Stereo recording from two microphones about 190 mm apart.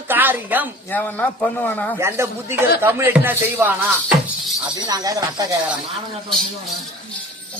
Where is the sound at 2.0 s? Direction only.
15° right (ahead or behind).